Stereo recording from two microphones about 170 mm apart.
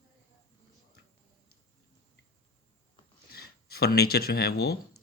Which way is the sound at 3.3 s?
65° left (ahead or behind).